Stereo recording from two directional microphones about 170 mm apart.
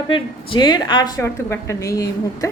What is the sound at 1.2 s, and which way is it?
A woman's voice, 15° left (ahead or behind).